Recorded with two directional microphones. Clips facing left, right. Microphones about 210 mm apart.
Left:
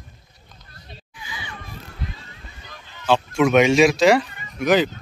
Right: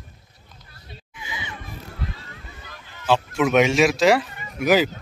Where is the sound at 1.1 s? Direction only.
20° right (ahead or behind).